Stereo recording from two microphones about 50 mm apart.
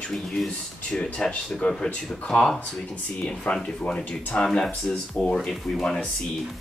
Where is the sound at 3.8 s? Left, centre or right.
Centre.